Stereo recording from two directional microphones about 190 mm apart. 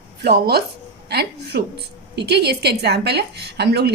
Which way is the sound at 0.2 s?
55° right (ahead or behind).